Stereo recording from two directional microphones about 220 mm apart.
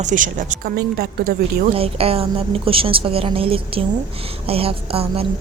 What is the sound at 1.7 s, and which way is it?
A woman's voice, 25° right (ahead or behind).